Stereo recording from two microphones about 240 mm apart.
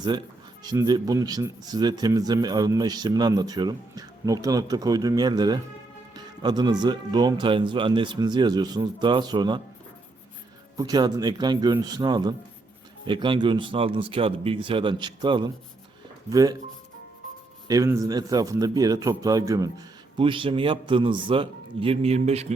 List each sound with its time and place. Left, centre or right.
0.0 s speech: centre
10.8 s speech: centre
17.7 s speech: centre